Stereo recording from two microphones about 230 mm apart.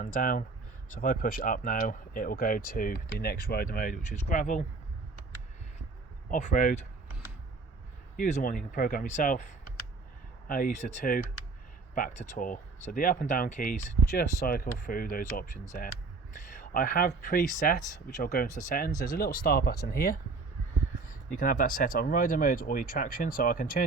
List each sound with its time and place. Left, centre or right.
0.0 s speech: left
6.3 s speech: left
8.1 s speech: left
10.5 s speech: left